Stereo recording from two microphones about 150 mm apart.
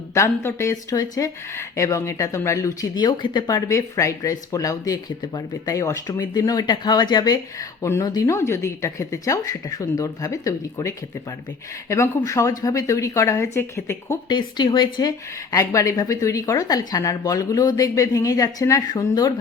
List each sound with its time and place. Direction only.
0.1 s speech: 20° left (ahead or behind)
14.3 s speech: 30° left (ahead or behind)